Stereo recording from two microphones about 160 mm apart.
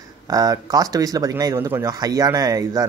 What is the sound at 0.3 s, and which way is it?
Speech, 25° right (ahead or behind).